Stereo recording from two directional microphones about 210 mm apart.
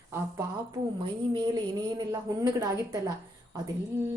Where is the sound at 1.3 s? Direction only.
20° right (ahead or behind).